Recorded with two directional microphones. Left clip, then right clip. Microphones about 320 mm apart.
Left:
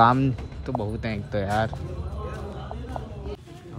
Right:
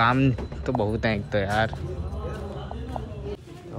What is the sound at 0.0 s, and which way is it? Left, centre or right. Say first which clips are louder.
Speech: left 3 dB; centre.